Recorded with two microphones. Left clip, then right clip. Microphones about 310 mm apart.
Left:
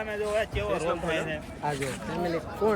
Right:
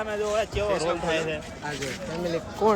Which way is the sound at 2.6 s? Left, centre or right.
Right.